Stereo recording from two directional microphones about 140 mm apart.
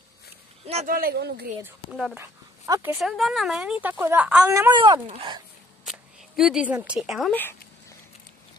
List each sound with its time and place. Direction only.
0.8 s speech: 90° right
1.9 s speech: 5° right (ahead or behind)
2.1 s speech: 20° right (ahead or behind)
2.9 s speech: centre (ahead or behind); by 4.7 s 20° right (ahead or behind)
4.7 s speech: 35° right (ahead or behind)
5.9 s speech: 5° right (ahead or behind)